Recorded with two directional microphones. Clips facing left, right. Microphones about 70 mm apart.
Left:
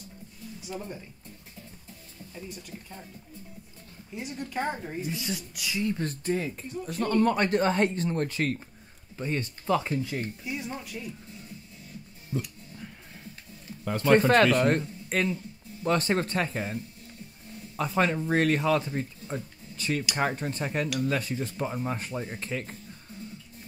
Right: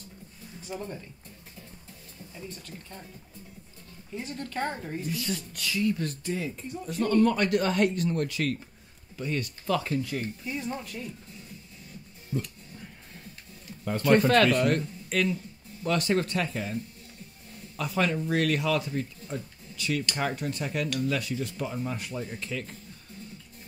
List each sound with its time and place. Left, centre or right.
0.6 s speech: centre
2.5 s speech: centre
4.1 s speech: centre
5.8 s speech: left
10.4 s speech: centre
14.0 s speech: left
17.7 s speech: left